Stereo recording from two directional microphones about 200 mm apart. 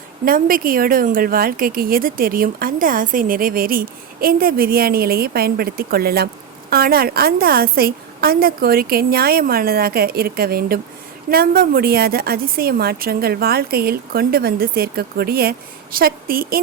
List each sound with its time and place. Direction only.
0.3 s speech: 45° right (ahead or behind)